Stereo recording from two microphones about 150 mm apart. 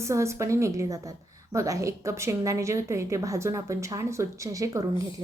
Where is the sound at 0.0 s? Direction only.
20° right (ahead or behind).